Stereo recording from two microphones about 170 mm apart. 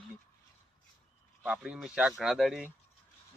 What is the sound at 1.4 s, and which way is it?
Speech, 5° right (ahead or behind).